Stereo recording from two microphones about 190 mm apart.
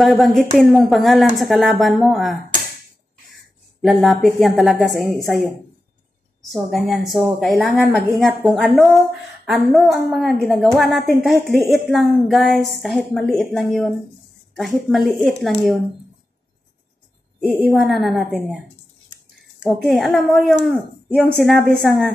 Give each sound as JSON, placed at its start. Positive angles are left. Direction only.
{"t": 0.0, "sound": "a woman's voice", "side_deg": 0}
{"t": 3.8, "sound": "a woman's voice", "side_deg": 0}
{"t": 6.5, "sound": "a woman's voice", "side_deg": 0}
{"t": 17.5, "sound": "a woman's voice", "side_deg": 0}
{"t": 19.6, "sound": "a woman's voice", "side_deg": 5}